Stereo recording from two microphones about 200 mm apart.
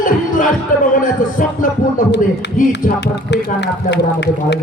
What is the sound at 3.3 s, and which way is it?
Speech, 60° left (ahead or behind).